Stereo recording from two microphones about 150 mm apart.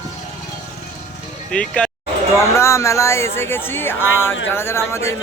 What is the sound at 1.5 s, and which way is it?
Speech, 10° left (ahead or behind).